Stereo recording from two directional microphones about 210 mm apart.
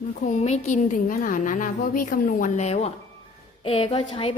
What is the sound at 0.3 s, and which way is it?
A woman's voice, 35° left (ahead or behind).